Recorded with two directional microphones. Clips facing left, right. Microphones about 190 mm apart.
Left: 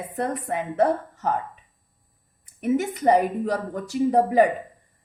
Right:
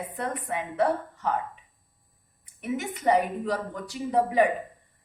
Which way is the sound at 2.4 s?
40° left (ahead or behind).